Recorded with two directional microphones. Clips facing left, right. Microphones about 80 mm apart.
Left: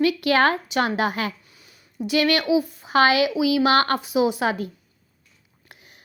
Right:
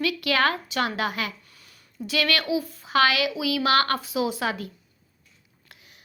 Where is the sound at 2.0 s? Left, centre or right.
Left.